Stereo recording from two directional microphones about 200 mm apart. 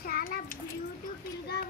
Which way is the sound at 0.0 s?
45° left (ahead or behind).